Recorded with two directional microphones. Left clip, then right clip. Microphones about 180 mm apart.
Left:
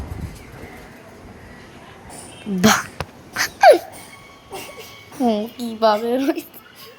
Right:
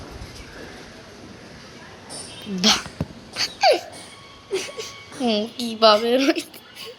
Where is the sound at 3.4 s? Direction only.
40° left (ahead or behind).